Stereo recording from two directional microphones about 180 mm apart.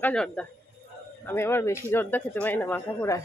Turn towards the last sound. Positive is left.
turn(degrees=15)  # may be behind; listen again after turning